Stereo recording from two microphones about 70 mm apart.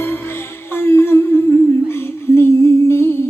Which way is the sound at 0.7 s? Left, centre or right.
Left.